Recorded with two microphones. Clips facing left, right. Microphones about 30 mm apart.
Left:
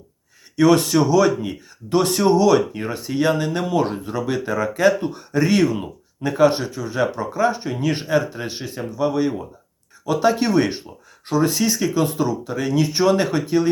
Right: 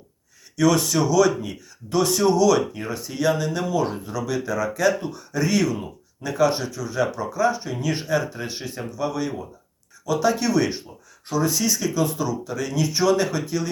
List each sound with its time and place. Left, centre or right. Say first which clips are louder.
0.5 s speech: left 4 dB; left
7.9 s speech: left 3 dB; left
10.1 s speech: left 3 dB; left